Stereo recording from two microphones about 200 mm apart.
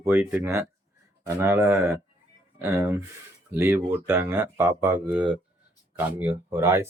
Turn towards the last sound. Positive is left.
turn(degrees=-15)  # may be behind; listen again after turning